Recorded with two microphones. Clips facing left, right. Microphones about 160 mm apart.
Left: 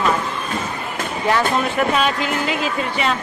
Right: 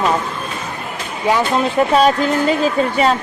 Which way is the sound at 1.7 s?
35° right (ahead or behind).